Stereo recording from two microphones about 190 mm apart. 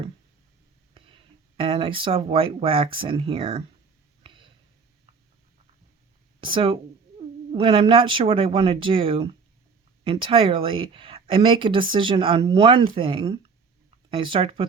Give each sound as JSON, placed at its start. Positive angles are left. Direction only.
{"t": 0.9, "sound": "speech", "side_deg": -30}
{"t": 4.2, "sound": "a sound", "side_deg": -25}
{"t": 6.4, "sound": "speech", "side_deg": -25}